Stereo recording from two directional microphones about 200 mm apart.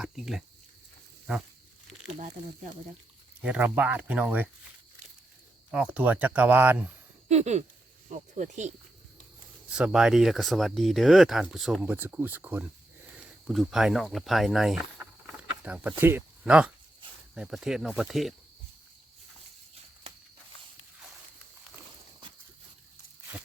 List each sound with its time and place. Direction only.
0.0 s speech: centre (ahead or behind)
3.4 s speech: 10° right (ahead or behind)
5.7 s speech: 5° right (ahead or behind)
7.3 s speech: 35° right (ahead or behind)
9.6 s speech: 5° right (ahead or behind)